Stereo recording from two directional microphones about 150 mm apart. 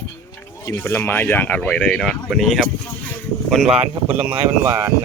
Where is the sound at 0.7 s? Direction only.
15° left (ahead or behind); by 4.9 s 20° right (ahead or behind).